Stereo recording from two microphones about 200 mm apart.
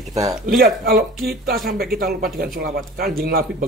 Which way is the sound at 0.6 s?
50° right (ahead or behind).